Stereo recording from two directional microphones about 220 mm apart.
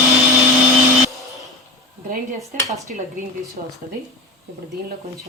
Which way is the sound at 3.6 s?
30° right (ahead or behind).